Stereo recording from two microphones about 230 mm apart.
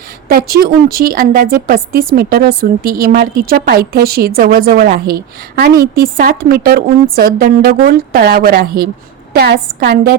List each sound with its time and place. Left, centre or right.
0.3 s speech: right